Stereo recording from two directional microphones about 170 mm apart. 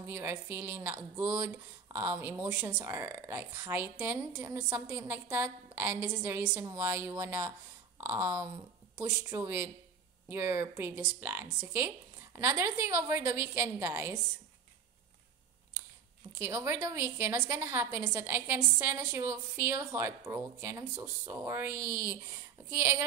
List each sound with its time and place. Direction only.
0.0 s a woman's voice: 15° right (ahead or behind)
16.3 s a woman's voice: 15° right (ahead or behind)